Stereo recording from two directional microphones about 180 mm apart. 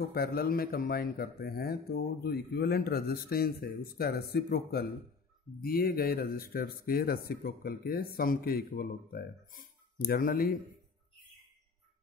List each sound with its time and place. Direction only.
0.1 s a man's voice: 55° left (ahead or behind)